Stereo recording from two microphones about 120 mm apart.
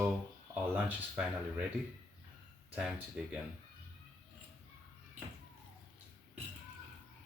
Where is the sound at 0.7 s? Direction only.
10° right (ahead or behind).